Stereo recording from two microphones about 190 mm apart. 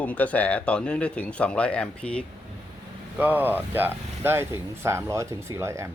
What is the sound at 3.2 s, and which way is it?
Speech, 10° right (ahead or behind).